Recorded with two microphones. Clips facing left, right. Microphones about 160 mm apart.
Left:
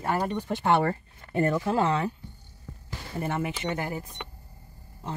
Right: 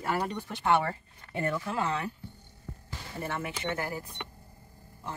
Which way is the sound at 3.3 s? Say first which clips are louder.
Left 3 dB; 20° left (ahead or behind).